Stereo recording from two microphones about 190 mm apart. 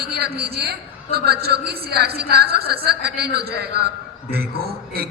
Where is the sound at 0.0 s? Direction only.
55° right (ahead or behind).